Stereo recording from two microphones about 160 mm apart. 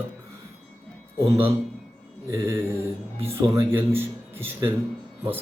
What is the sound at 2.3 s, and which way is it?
Speech, 15° right (ahead or behind).